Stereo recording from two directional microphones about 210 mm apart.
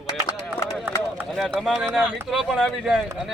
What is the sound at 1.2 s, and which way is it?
Speech, centre (ahead or behind).